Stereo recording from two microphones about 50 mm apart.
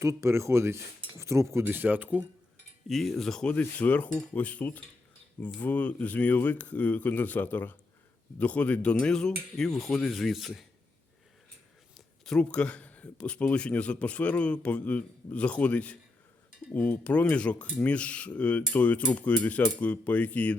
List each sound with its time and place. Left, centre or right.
0.0 s speech: right
1.2 s speech: right
1.6 s speech: right
2.8 s speech: centre
3.5 s speech: left; by 10.7 s centre
11.9 s a sound: centre
12.4 s a man's voice: left